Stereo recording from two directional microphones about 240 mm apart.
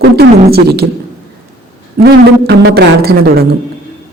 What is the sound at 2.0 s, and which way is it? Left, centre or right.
A man's voice, right.